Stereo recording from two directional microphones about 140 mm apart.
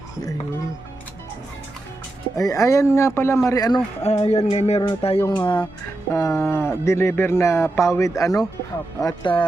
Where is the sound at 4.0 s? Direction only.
50° left (ahead or behind).